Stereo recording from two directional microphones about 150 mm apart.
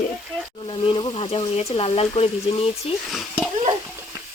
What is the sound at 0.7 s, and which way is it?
Speech, 35° left (ahead or behind).